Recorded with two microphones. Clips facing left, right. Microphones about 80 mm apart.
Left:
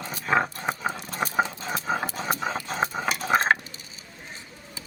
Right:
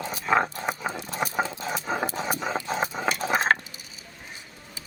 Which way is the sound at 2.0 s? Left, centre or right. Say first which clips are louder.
Right 2 dB; centre.